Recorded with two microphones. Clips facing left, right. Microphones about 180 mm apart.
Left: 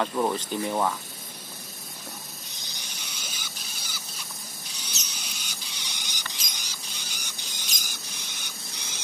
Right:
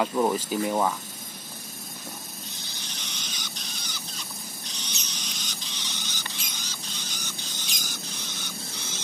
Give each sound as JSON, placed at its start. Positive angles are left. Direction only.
{"t": 0.0, "sound": "speech", "side_deg": -5}
{"t": 2.6, "sound": "rodents", "side_deg": 15}
{"t": 5.1, "sound": "printer", "side_deg": 10}